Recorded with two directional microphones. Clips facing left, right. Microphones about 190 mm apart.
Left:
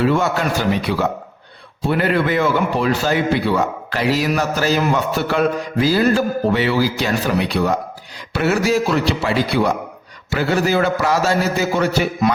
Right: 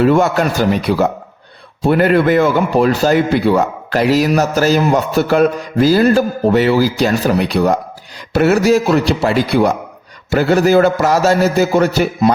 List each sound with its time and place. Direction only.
0.0 s a man's voice: 45° right (ahead or behind)